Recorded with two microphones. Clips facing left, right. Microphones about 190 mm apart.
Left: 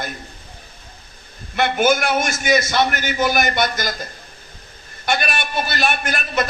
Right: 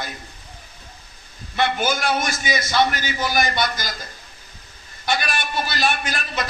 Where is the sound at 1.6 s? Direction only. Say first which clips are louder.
Left 5 dB; 50° left (ahead or behind).